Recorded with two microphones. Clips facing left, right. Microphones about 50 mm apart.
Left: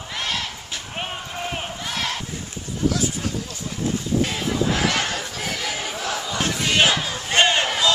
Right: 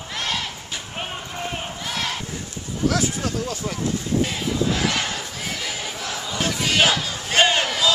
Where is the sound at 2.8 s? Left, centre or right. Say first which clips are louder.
Right 1 dB; right.